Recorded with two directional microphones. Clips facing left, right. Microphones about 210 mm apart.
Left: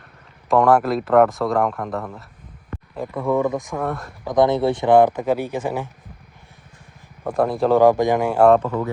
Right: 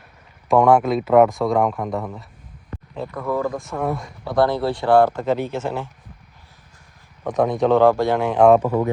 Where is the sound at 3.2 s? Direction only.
20° left (ahead or behind).